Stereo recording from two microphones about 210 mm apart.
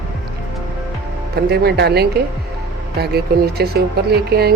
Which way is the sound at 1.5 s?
50° right (ahead or behind).